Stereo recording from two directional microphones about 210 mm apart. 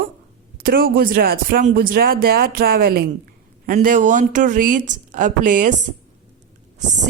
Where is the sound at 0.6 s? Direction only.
45° right (ahead or behind).